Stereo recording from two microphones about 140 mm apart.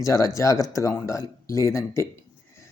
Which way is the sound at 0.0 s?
25° left (ahead or behind).